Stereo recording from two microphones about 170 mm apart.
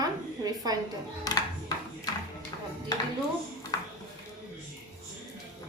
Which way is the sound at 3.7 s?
20° left (ahead or behind).